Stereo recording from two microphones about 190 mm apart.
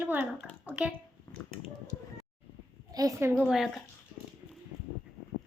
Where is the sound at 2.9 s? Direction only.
15° right (ahead or behind).